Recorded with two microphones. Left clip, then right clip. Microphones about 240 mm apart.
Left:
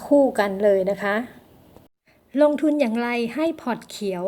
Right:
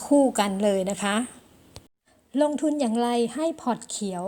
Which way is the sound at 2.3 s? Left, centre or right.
Centre.